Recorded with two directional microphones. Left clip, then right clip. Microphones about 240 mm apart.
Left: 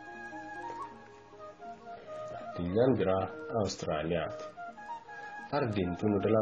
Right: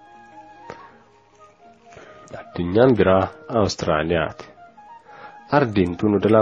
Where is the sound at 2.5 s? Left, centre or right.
Right.